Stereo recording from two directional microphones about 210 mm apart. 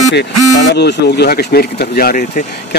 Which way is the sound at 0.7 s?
50° left (ahead or behind).